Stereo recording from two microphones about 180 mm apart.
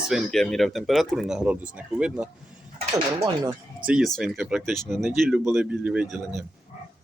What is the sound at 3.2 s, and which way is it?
Speech, 25° right (ahead or behind).